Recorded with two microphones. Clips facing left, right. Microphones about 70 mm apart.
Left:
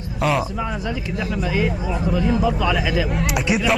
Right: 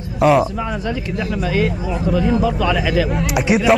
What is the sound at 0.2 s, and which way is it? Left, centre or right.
Speech, centre.